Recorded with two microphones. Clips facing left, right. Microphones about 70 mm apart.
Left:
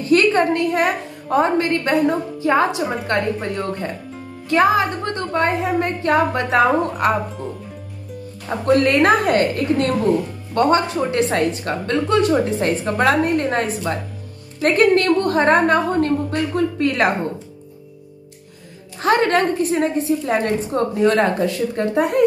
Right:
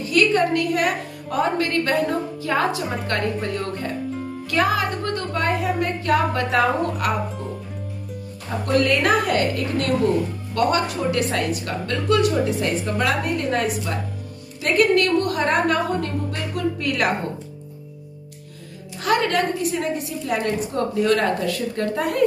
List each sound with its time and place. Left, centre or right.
0.0 s a woman's voice: left
8.5 s a woman's voice: left
19.0 s a woman's voice: left